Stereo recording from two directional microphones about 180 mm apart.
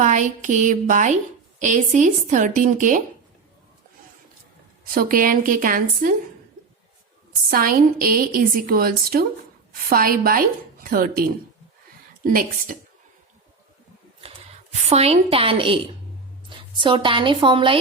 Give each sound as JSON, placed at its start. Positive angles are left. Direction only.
{"t": 0.0, "sound": "a woman's voice", "side_deg": -45}
{"t": 4.9, "sound": "a woman's voice", "side_deg": -50}
{"t": 7.5, "sound": "a woman's voice", "side_deg": -55}
{"t": 14.7, "sound": "a woman's voice", "side_deg": -35}